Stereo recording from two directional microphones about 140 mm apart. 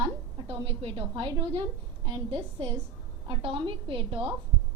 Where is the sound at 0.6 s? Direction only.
35° right (ahead or behind).